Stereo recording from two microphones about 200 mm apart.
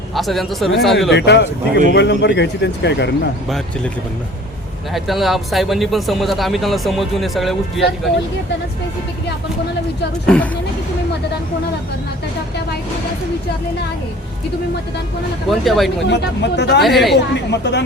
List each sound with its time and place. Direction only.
0.1 s speech: centre (ahead or behind)
1.1 s speech: 60° left (ahead or behind)
4.9 s speech: centre (ahead or behind)
10.2 s speech: 5° left (ahead or behind)
15.4 s speech: centre (ahead or behind)
16.0 s speech: 60° left (ahead or behind)
16.8 s speech: centre (ahead or behind)
17.5 s speech: 60° left (ahead or behind)